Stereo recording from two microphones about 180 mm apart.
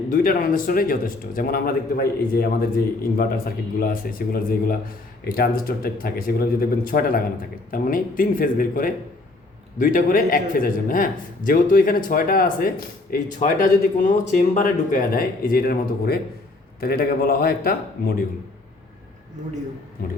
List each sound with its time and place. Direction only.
0.1 s a man's voice: 50° left (ahead or behind)